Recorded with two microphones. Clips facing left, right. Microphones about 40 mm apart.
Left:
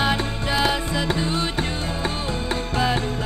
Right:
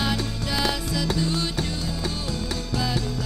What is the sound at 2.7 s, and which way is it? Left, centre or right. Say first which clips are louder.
Music: left 5 dB; left.